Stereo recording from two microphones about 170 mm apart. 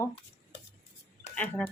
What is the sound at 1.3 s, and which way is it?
Speech, 10° left (ahead or behind).